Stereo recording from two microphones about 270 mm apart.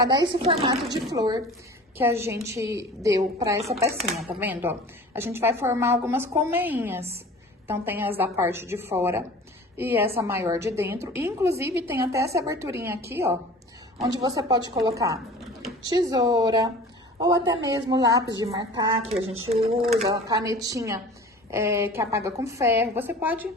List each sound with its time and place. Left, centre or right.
0.0 s a woman's voice: centre